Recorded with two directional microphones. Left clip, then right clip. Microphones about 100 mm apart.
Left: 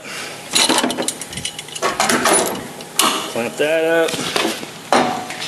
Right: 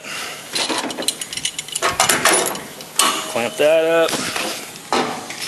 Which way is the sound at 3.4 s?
25° right (ahead or behind).